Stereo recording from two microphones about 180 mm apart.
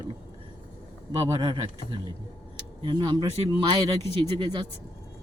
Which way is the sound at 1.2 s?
20° right (ahead or behind).